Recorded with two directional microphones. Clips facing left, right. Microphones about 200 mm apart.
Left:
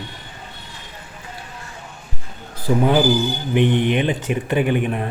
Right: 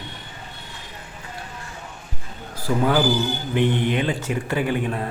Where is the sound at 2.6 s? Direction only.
20° left (ahead or behind).